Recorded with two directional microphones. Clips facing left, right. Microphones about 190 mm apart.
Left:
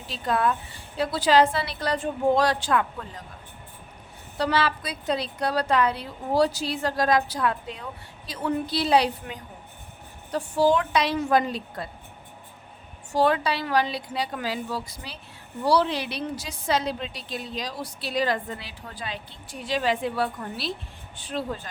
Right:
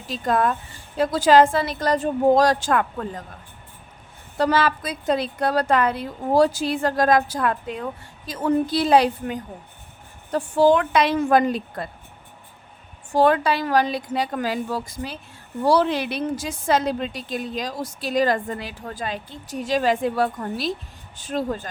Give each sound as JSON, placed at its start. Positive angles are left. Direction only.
{"t": 0.1, "sound": "a woman's voice", "side_deg": -45}
{"t": 4.4, "sound": "a woman's voice", "side_deg": -45}
{"t": 13.1, "sound": "a woman's voice", "side_deg": -50}